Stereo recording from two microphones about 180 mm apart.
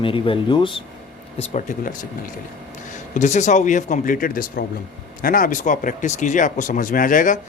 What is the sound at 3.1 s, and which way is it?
Speech, 40° left (ahead or behind).